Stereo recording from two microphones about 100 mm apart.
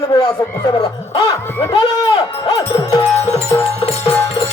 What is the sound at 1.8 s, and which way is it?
Speech, 45° left (ahead or behind).